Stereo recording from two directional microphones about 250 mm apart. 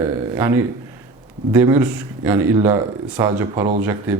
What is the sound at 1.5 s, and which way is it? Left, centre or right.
A man's voice, centre.